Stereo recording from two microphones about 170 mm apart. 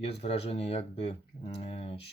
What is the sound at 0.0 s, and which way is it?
Speech, 35° left (ahead or behind).